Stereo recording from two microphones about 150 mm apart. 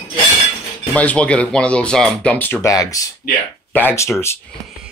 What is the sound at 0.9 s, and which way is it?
Speech, 10° left (ahead or behind).